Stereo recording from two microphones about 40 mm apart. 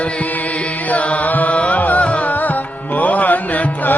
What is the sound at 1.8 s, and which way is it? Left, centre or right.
Carnatic music, left.